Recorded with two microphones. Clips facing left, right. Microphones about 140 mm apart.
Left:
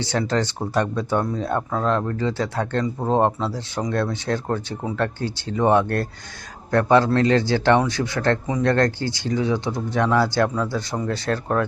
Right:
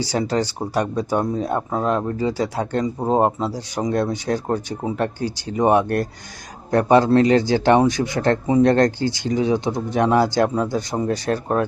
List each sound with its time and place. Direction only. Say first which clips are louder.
0.0 s speech: right 1 dB; 10° right (ahead or behind)